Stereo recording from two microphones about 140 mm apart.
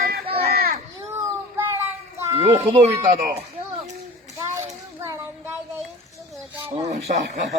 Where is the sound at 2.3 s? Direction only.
45° right (ahead or behind).